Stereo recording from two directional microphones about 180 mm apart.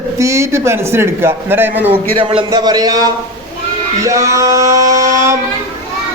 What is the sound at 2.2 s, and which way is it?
Speech, 30° right (ahead or behind).